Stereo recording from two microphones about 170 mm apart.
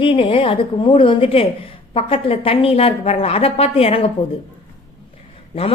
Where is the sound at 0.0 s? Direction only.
30° left (ahead or behind).